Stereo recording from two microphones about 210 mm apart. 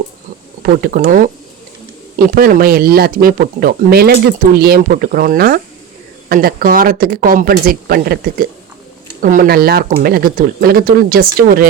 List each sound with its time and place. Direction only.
0.6 s speech: 45° right (ahead or behind)